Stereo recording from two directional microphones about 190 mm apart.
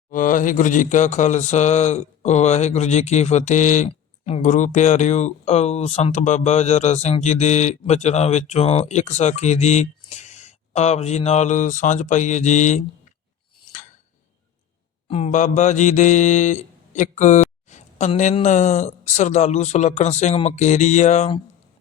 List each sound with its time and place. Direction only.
0.1 s a man's voice: 45° left (ahead or behind)
15.0 s a man's voice: 35° left (ahead or behind)